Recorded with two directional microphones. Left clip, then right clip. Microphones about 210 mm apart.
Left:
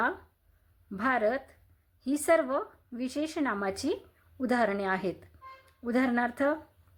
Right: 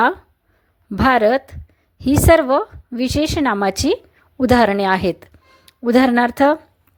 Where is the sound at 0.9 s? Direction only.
40° right (ahead or behind).